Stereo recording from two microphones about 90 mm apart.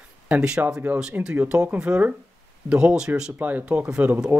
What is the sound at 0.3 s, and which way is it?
Speech, 10° right (ahead or behind).